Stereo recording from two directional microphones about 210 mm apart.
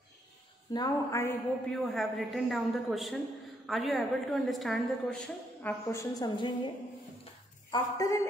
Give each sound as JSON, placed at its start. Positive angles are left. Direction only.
{"t": 0.7, "sound": "a woman's voice", "side_deg": 15}
{"t": 1.7, "sound": "a woman's voice", "side_deg": 0}
{"t": 7.7, "sound": "a woman's voice", "side_deg": 15}